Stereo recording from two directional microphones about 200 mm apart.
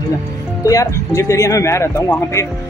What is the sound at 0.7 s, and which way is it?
A man's voice, 15° left (ahead or behind).